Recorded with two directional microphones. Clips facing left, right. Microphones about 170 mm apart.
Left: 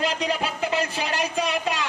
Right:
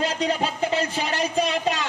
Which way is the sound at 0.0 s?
30° right (ahead or behind).